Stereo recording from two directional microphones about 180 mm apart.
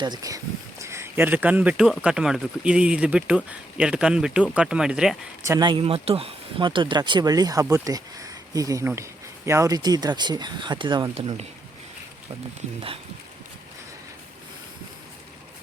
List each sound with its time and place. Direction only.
0.0 s speech: 20° right (ahead or behind); by 5.1 s 5° right (ahead or behind)
5.5 s speech: 25° right (ahead or behind)
11.1 s speech: 35° right (ahead or behind)